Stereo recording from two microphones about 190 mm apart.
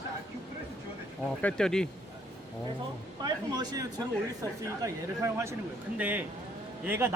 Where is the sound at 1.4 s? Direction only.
5° left (ahead or behind).